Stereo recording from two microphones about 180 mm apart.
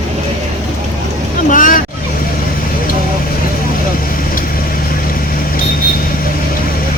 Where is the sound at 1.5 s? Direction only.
45° left (ahead or behind).